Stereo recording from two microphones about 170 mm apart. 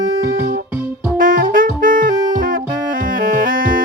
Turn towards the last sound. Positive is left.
turn(degrees=-55)  # may be behind; listen again after turning